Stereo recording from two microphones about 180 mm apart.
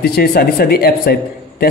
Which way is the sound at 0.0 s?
60° left (ahead or behind).